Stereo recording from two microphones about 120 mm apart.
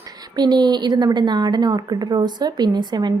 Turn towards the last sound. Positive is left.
turn(degrees=-35)  # may be behind; listen again after turning